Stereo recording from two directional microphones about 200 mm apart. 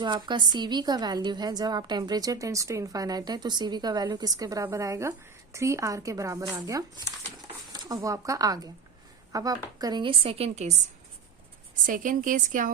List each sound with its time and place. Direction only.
0.0 s a woman's voice: 20° right (ahead or behind)
11.9 s a woman's voice: 40° right (ahead or behind)